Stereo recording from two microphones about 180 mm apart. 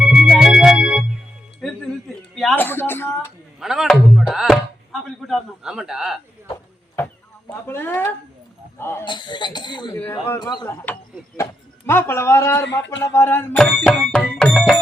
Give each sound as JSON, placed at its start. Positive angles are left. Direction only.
{"t": 0.0, "sound": "music", "side_deg": -5}
{"t": 2.3, "sound": "a sound", "side_deg": 0}
{"t": 2.6, "sound": "speech", "side_deg": 10}
{"t": 3.6, "sound": "speech", "side_deg": 0}
{"t": 7.7, "sound": "a man's voice", "side_deg": 10}
{"t": 9.0, "sound": "speech", "side_deg": 25}
{"t": 9.9, "sound": "a man's voice", "side_deg": 15}
{"t": 11.9, "sound": "a man's voice", "side_deg": 15}
{"t": 13.0, "sound": "music", "side_deg": 15}